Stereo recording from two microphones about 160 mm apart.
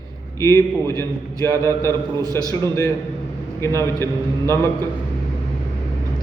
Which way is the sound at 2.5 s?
20° left (ahead or behind).